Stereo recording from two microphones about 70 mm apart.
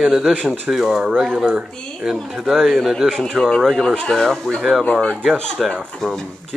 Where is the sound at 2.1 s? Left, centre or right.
Centre.